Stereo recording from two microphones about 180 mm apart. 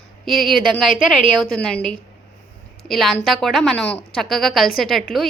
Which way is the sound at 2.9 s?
Centre (ahead or behind).